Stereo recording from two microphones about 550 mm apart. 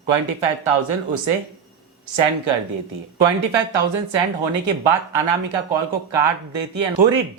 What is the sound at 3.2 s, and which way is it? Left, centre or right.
Speech, right.